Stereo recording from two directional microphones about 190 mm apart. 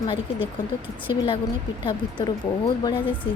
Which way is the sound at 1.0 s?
25° left (ahead or behind).